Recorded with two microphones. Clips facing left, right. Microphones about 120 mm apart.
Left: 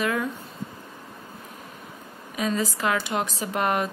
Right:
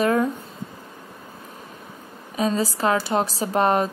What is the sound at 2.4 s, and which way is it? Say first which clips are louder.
A woman's voice: right 4 dB; 30° right (ahead or behind).